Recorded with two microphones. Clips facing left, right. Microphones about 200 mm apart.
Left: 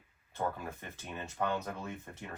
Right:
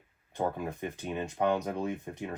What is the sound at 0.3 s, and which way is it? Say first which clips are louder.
Speech: right 5 dB; 15° right (ahead or behind).